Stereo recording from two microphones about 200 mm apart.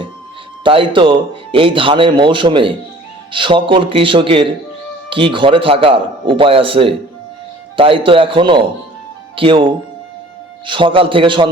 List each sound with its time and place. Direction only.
0.6 s a man's voice: 25° right (ahead or behind)